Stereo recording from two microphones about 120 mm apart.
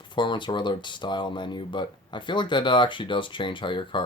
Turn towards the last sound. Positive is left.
turn(degrees=45)  # may be behind; listen again after turning